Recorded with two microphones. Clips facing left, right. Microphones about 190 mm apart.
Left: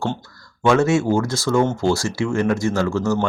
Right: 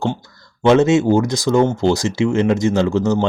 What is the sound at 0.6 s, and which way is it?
Speech, 20° right (ahead or behind).